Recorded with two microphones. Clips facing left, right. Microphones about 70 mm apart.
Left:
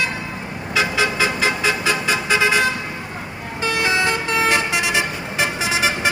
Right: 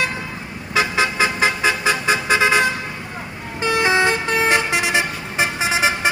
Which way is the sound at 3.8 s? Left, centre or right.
Right.